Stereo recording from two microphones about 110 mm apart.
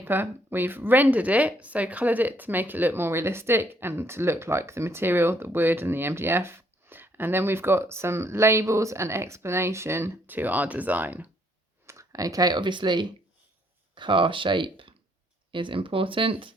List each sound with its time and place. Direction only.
0.0 s speech: 20° right (ahead or behind)
11.9 s speech: 30° right (ahead or behind); by 16.6 s 50° right (ahead or behind)